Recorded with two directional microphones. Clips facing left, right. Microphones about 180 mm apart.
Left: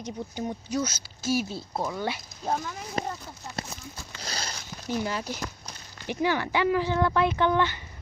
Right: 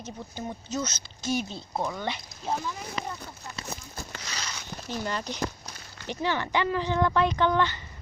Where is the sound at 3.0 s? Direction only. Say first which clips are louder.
Left 6 dB; 50° left (ahead or behind).